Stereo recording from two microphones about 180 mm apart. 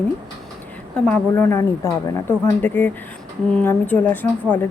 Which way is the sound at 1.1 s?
10° left (ahead or behind).